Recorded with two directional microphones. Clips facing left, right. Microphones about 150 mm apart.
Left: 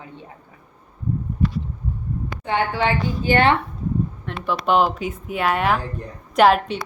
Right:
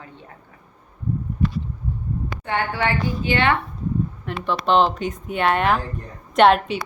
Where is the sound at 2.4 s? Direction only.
20° left (ahead or behind).